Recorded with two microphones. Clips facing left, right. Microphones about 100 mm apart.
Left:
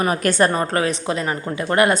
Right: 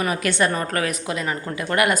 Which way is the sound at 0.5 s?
30° left (ahead or behind).